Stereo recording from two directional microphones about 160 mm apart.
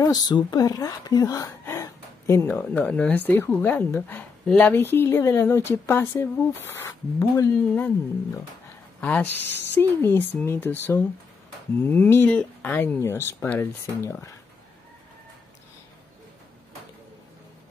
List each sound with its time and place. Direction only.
0.0 s a woman's voice: 25° left (ahead or behind)
9.0 s a woman's voice: 10° left (ahead or behind)
11.8 s a woman's voice: 10° left (ahead or behind)